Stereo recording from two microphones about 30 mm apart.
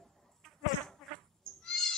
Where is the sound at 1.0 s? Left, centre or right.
Centre.